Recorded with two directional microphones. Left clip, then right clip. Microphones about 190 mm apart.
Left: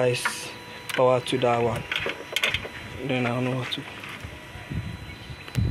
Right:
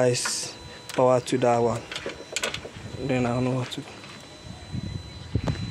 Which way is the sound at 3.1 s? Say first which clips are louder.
Right 1 dB; 30° right (ahead or behind).